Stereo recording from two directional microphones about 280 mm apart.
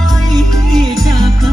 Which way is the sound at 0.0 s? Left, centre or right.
Centre.